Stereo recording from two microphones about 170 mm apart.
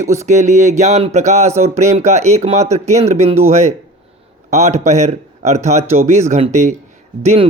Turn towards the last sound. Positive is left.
turn(degrees=-35)  # may be behind; listen again after turning